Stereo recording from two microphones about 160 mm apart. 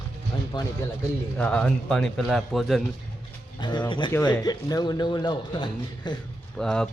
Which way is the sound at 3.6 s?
30° left (ahead or behind).